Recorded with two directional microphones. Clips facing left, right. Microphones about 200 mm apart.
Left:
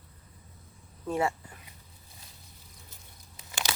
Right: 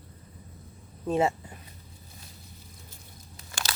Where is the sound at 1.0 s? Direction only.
20° right (ahead or behind).